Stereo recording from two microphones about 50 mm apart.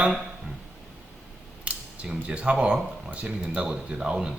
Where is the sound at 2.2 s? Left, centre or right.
Right.